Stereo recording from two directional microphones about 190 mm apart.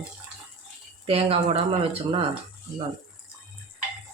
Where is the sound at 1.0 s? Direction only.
30° right (ahead or behind).